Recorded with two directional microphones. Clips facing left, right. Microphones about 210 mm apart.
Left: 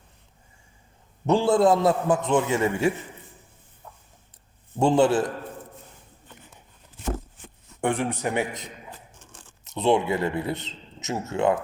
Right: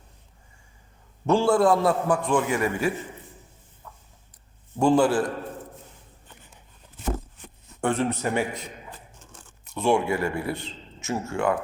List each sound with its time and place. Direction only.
1.3 s a man's voice: 20° left (ahead or behind)
4.8 s a man's voice: 25° left (ahead or behind)
7.8 s speech: 15° left (ahead or behind)
9.6 s speech: 20° left (ahead or behind)